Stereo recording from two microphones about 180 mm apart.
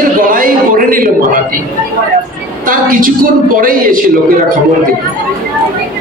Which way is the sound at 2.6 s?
50° right (ahead or behind).